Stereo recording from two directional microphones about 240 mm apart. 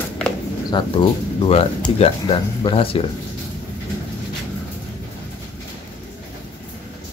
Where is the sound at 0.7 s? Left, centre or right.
Centre.